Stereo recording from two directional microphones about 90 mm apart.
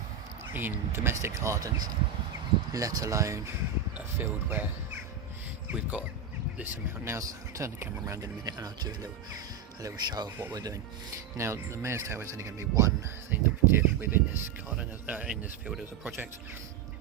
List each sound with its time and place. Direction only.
0.5 s speech: 20° right (ahead or behind)
4.3 s speech: 25° right (ahead or behind)
5.7 s speech: 10° right (ahead or behind)
6.6 s speech: 30° right (ahead or behind)
11.3 s speech: 30° right (ahead or behind)
14.8 s speech: 15° right (ahead or behind)
16.0 s speech: 20° right (ahead or behind)